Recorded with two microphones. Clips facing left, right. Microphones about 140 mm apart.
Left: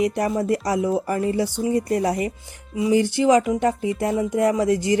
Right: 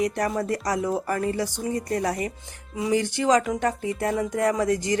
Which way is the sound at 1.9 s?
30° left (ahead or behind).